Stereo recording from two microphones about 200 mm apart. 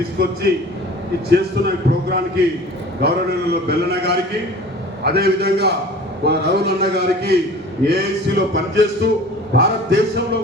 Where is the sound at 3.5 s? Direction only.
55° right (ahead or behind).